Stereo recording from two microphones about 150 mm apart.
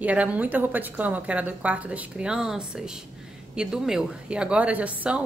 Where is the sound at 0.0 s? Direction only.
10° right (ahead or behind).